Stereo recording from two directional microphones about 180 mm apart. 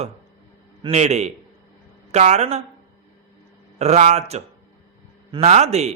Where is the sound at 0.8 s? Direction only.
35° right (ahead or behind).